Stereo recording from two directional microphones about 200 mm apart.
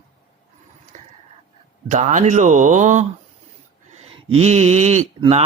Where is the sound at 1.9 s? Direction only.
40° right (ahead or behind).